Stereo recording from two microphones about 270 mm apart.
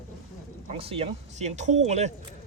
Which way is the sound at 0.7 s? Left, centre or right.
Right.